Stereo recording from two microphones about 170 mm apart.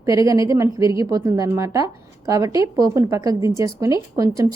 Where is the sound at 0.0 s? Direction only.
20° right (ahead or behind).